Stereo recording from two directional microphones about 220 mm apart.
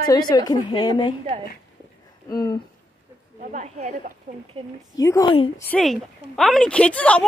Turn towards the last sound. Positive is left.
turn(degrees=5)  # may be behind; listen again after turning